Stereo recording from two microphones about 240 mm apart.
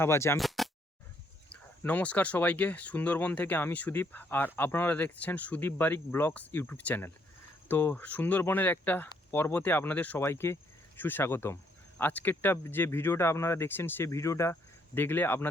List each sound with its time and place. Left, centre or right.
0.0 s speech: centre
0.3 s a sound: centre
1.8 s speech: centre